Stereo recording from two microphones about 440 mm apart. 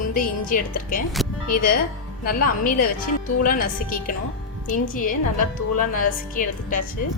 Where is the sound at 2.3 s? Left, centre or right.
Centre.